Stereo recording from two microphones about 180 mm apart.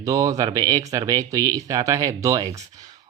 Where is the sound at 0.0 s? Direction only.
20° right (ahead or behind).